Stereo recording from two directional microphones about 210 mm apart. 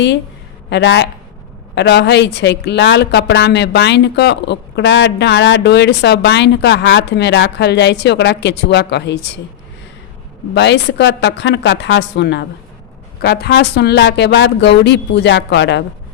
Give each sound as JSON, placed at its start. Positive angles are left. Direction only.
{"t": 0.7, "sound": "speech", "side_deg": 55}
{"t": 10.5, "sound": "speech", "side_deg": 55}